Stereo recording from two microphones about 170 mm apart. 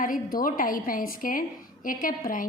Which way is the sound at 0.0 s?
55° left (ahead or behind).